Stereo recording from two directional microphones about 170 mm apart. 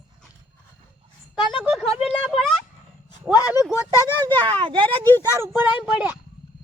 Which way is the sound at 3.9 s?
25° right (ahead or behind).